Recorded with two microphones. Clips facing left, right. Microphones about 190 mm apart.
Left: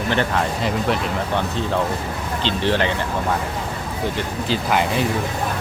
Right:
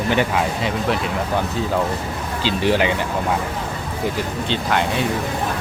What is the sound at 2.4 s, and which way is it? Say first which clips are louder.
Speech: right 2 dB; 10° right (ahead or behind).